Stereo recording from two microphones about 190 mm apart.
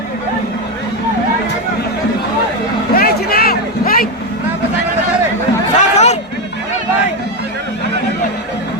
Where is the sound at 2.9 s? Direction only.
55° left (ahead or behind).